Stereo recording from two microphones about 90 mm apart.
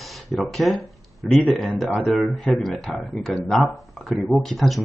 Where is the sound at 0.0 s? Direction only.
Centre (ahead or behind).